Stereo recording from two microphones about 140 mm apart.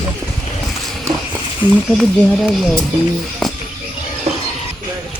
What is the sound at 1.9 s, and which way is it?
Speech, centre (ahead or behind).